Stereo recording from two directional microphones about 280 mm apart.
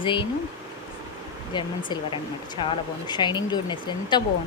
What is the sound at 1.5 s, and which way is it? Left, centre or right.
Speech, centre.